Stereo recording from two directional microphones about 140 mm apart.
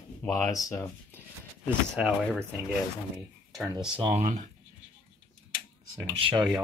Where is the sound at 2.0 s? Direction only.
5° right (ahead or behind).